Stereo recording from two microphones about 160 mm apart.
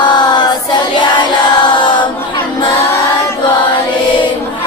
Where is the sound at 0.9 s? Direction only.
25° left (ahead or behind).